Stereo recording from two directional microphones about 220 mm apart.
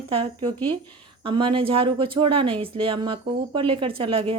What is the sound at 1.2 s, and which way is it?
Speech, 20° right (ahead or behind).